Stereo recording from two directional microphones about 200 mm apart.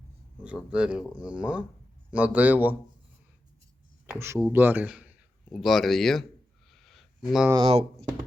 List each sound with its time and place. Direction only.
0.5 s speech: 5° right (ahead or behind)
4.0 s speech: 10° right (ahead or behind)
6.7 s a sound: centre (ahead or behind)
7.5 s speech: 30° right (ahead or behind)